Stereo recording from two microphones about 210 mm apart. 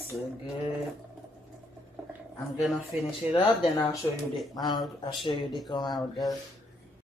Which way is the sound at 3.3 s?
25° left (ahead or behind).